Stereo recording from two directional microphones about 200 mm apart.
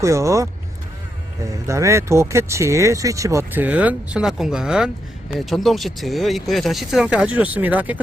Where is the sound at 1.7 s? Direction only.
15° right (ahead or behind).